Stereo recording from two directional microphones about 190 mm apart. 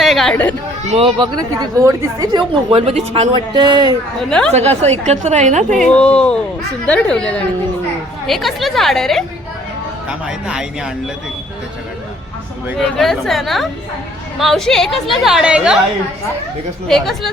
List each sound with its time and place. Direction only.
0.0 s chatter: centre (ahead or behind)
0.9 s a woman's voice: 30° right (ahead or behind)
4.3 s a woman's voice: 5° left (ahead or behind)
4.8 s a woman's voice: 35° right (ahead or behind)
5.8 s a woman's voice: 5° left (ahead or behind)
13.0 s a woman's voice: centre (ahead or behind)
16.9 s a woman's voice: centre (ahead or behind)